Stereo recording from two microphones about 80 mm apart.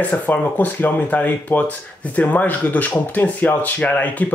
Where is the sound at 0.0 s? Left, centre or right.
Centre.